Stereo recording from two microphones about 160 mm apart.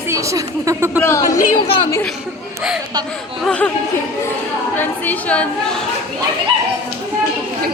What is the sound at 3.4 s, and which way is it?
Speech, 5° left (ahead or behind).